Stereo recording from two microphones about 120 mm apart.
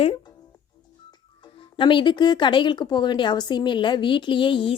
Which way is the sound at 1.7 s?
45° left (ahead or behind).